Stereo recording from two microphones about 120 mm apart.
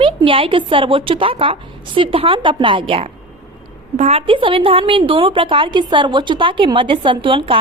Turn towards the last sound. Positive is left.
turn(degrees=-45)  # may be behind; listen again after turning